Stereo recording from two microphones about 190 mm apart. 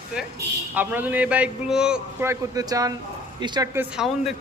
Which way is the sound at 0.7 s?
10° right (ahead or behind).